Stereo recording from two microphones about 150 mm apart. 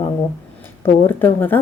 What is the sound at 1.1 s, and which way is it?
Speech, 15° left (ahead or behind).